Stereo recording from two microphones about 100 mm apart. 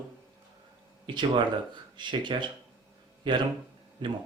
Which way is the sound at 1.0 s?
50° right (ahead or behind).